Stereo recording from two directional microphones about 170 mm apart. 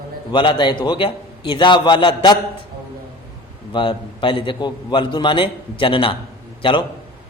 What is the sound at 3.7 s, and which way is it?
A man's voice, 30° left (ahead or behind).